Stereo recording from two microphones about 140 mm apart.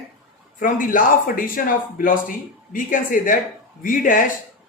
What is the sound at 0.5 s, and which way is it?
A woman's voice, 75° left (ahead or behind).